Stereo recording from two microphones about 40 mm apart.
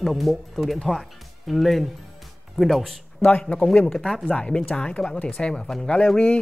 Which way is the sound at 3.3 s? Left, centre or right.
Left.